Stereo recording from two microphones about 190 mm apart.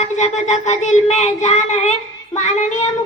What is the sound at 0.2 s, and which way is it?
Child singing, 40° left (ahead or behind).